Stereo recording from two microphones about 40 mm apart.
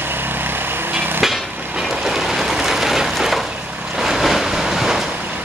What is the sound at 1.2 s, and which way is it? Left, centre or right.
Hammer, centre.